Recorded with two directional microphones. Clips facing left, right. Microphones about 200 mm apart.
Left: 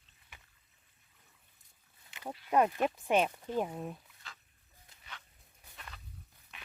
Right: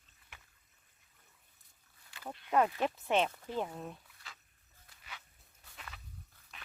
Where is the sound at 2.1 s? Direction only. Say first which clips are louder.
Left 3 dB; 20° left (ahead or behind).